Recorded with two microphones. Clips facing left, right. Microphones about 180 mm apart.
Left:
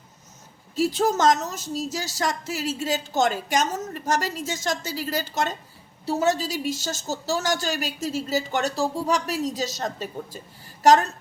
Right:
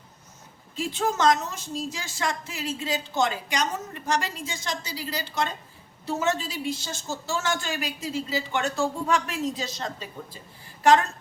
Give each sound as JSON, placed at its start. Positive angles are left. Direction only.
{"t": 0.8, "sound": "a woman's voice", "side_deg": 40}